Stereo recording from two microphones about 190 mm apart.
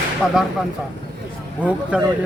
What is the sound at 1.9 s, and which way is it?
Speech, 5° right (ahead or behind).